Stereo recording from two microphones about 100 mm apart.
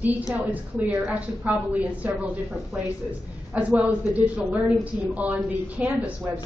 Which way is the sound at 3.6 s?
15° right (ahead or behind).